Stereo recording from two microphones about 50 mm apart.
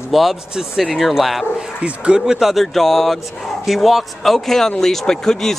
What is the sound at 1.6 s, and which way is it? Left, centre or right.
Speech, right.